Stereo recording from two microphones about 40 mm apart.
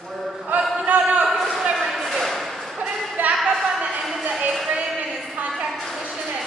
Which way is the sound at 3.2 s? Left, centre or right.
Right.